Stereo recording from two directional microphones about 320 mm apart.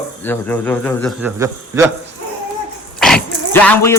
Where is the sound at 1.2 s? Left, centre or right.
Centre.